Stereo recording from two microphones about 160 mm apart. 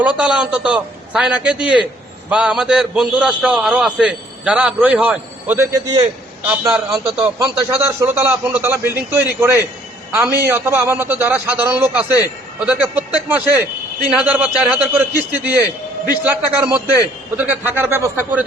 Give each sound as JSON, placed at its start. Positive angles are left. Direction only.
{"t": 0.0, "sound": "a man's voice", "side_deg": -5}
{"t": 5.8, "sound": "a man's voice", "side_deg": -25}
{"t": 6.4, "sound": "a man's voice", "side_deg": -10}
{"t": 7.0, "sound": "a man's voice", "side_deg": -15}
{"t": 16.2, "sound": "a man's voice", "side_deg": -10}